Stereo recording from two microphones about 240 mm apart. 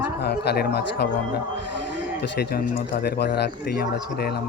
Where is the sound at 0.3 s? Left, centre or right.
Left.